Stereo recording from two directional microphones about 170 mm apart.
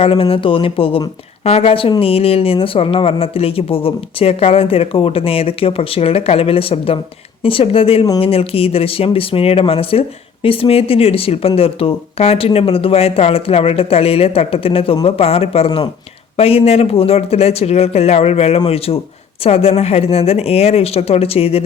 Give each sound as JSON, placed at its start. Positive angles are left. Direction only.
{"t": 0.0, "sound": "speech", "side_deg": 30}